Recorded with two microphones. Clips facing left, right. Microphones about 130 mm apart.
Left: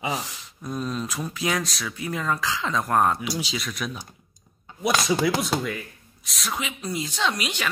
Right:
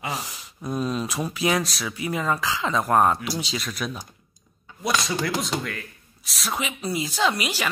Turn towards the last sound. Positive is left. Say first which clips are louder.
# right 3 dB
turn(degrees=-5)  # may be behind; listen again after turning